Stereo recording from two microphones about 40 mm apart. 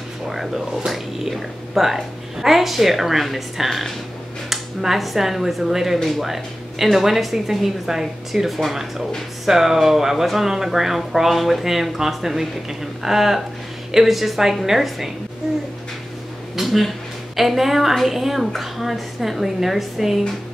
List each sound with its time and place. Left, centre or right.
0.3 s a woman's voice: centre
16.5 s a sound: centre
17.4 s a woman's voice: centre